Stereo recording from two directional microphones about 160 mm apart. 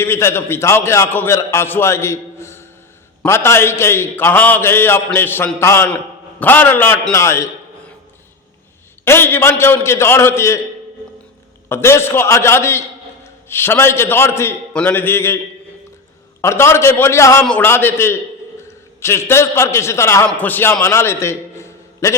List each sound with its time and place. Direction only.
0.0 s a man's voice: 15° left (ahead or behind)
9.0 s a man's voice: 15° left (ahead or behind)
11.7 s a man's voice: 15° left (ahead or behind)
16.4 s a man's voice: 15° left (ahead or behind)